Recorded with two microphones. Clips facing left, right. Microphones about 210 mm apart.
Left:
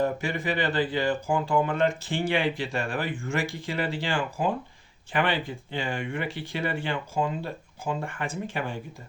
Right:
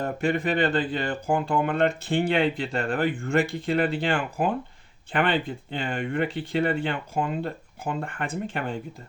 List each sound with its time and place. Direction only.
0.2 s speech: 60° right (ahead or behind)